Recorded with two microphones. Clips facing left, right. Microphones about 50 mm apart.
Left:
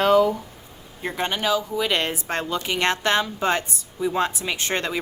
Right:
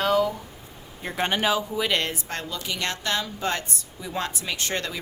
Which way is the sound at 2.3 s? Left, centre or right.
Left.